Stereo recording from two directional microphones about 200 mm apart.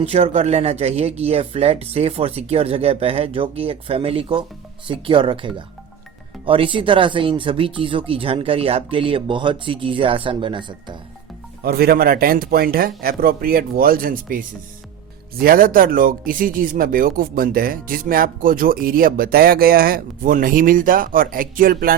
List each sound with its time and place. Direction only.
0.0 s speech: 35° right (ahead or behind)
11.6 s speech: 50° right (ahead or behind)